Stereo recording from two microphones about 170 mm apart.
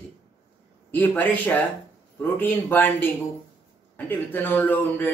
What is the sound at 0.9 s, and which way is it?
A man's voice, 10° left (ahead or behind).